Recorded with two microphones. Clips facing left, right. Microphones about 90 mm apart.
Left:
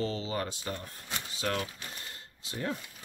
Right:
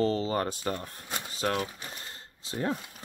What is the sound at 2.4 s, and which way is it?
Speech, 30° right (ahead or behind).